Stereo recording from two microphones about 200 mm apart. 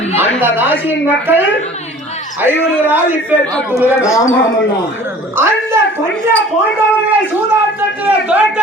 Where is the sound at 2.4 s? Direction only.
10° right (ahead or behind).